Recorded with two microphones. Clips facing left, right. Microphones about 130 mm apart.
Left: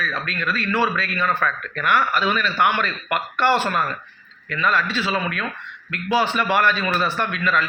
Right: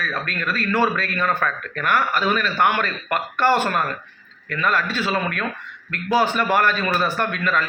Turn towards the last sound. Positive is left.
turn(degrees=-45)  # may be behind; listen again after turning